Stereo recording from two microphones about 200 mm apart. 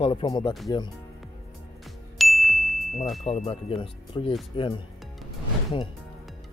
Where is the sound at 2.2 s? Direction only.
Centre (ahead or behind).